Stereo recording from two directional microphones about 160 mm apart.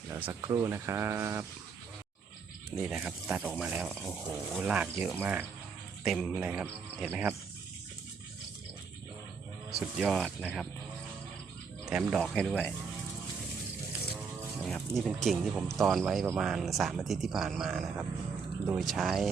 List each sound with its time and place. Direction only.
0.1 s a sound: 10° right (ahead or behind)
0.4 s speech: 20° right (ahead or behind)
2.7 s speech: 5° right (ahead or behind)
6.1 s speech: centre (ahead or behind)
9.7 s speech: centre (ahead or behind)
11.9 s speech: 5° right (ahead or behind)
14.6 s speech: 5° left (ahead or behind)